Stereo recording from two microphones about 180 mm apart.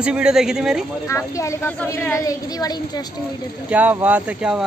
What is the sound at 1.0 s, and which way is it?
A woman's voice, 15° left (ahead or behind).